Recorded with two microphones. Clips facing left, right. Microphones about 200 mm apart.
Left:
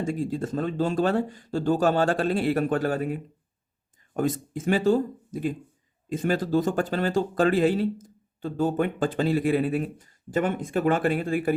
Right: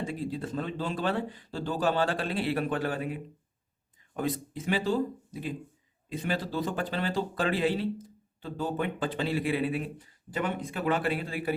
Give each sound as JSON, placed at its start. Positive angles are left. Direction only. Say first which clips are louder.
{"t": 0.0, "sound": "speech", "louder": "left 6 dB", "side_deg": 45}